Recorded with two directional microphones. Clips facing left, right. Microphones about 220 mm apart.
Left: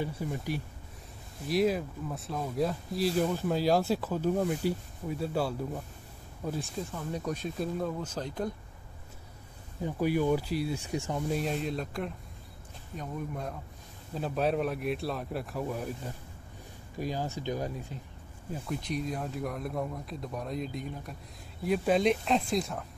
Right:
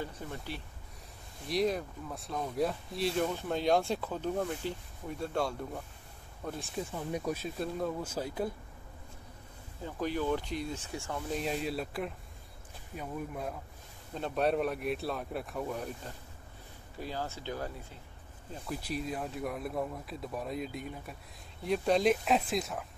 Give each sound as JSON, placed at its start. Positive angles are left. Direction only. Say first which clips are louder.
{"t": 0.0, "sound": "speech", "louder": "left 6 dB", "side_deg": 10}
{"t": 6.9, "sound": "speech", "louder": "right 3 dB", "side_deg": -15}
{"t": 9.8, "sound": "speech", "louder": "left 5 dB", "side_deg": 10}
{"t": 11.3, "sound": "speech", "louder": "right 1 dB", "side_deg": 0}
{"t": 16.9, "sound": "speech", "louder": "left 5 dB", "side_deg": 15}
{"t": 18.7, "sound": "speech", "louder": "left 2 dB", "side_deg": -5}